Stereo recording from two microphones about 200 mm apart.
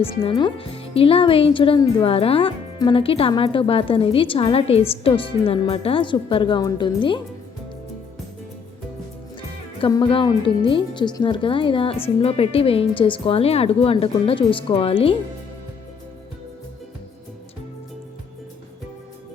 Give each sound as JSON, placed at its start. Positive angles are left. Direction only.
{"t": 0.0, "sound": "speech", "side_deg": 25}
{"t": 9.8, "sound": "speech", "side_deg": 25}